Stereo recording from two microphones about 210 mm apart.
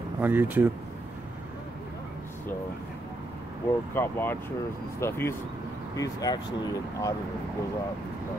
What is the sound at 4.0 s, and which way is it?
Speech, 10° left (ahead or behind).